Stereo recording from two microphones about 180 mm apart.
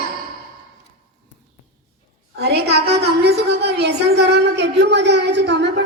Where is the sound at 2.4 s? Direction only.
70° right (ahead or behind).